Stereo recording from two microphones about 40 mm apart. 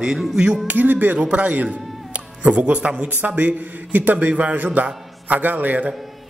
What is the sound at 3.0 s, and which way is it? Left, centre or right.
A man's voice, right.